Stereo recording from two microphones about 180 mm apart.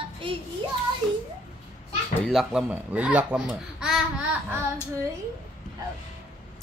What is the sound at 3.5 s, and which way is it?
Babbling, 5° right (ahead or behind).